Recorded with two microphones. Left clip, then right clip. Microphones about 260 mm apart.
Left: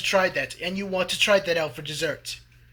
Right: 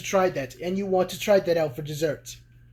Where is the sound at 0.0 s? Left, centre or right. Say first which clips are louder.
Left 1 dB; centre.